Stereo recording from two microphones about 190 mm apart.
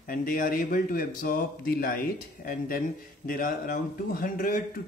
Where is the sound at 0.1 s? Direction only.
50° left (ahead or behind).